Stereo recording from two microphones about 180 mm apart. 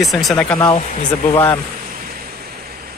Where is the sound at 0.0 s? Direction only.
Centre (ahead or behind).